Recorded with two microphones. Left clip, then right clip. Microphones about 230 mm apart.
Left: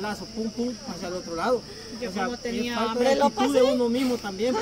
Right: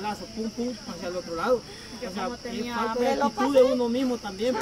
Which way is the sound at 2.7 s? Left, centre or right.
Left.